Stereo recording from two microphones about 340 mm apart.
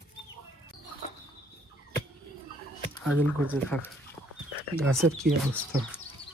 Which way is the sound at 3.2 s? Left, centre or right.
Centre.